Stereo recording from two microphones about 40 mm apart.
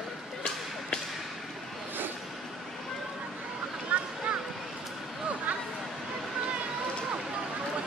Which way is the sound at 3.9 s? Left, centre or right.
Right.